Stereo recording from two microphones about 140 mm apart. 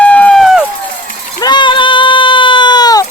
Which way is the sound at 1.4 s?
35° left (ahead or behind).